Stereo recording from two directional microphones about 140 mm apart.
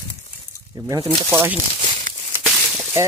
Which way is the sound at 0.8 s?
20° right (ahead or behind).